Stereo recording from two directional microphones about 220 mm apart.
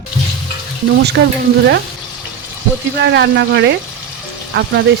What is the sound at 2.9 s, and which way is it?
Speech, 50° right (ahead or behind).